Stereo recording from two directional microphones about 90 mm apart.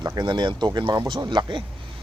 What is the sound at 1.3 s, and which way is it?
Speech, 60° right (ahead or behind).